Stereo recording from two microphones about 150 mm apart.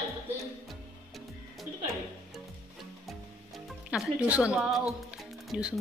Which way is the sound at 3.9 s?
10° right (ahead or behind).